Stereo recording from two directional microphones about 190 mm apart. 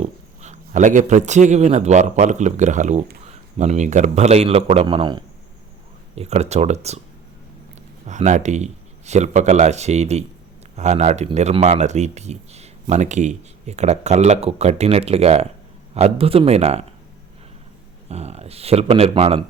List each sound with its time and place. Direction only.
0.0 s a man's voice: 40° right (ahead or behind)
8.0 s a man's voice: 40° right (ahead or behind)
18.1 s a man's voice: 35° right (ahead or behind)